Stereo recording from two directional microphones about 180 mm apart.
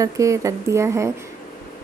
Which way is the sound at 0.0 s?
15° right (ahead or behind).